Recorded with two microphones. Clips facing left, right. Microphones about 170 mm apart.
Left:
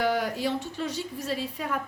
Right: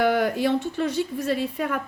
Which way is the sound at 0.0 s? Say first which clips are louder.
Right 5 dB; 60° right (ahead or behind).